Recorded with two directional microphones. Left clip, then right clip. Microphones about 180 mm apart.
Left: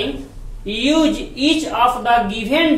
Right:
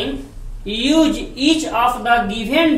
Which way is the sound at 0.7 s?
20° left (ahead or behind).